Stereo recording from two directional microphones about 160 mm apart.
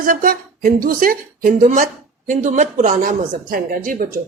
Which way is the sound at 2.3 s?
50° right (ahead or behind).